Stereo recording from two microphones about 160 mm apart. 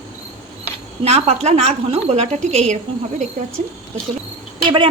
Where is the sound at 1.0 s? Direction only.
40° right (ahead or behind).